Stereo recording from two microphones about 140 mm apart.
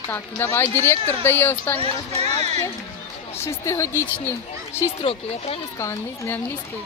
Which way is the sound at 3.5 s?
20° left (ahead or behind).